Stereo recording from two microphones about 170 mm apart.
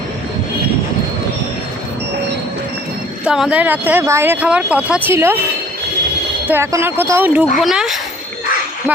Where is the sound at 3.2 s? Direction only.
5° right (ahead or behind).